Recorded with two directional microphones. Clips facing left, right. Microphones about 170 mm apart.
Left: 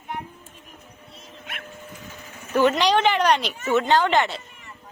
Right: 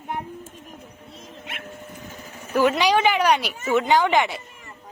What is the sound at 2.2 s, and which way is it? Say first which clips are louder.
Vehicle: right 2 dB; 35° right (ahead or behind).